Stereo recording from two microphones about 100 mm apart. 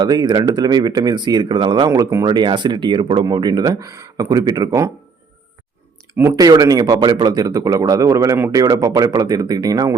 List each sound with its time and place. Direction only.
0.0 s speech: 45° right (ahead or behind)
1.9 s speech: 30° right (ahead or behind)
2.2 s speech: 45° right (ahead or behind)
3.2 s speech: 40° right (ahead or behind)
6.1 s speech: 30° right (ahead or behind)